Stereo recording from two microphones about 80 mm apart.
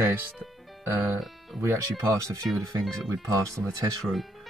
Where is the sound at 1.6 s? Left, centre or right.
Right.